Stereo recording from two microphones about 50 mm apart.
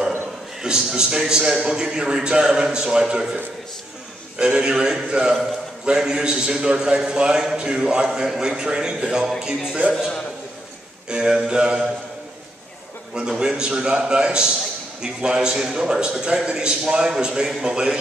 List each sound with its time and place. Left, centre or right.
0.6 s a man's voice: centre
4.4 s a man's voice: centre
11.1 s a man's voice: centre
13.3 s a man's voice: centre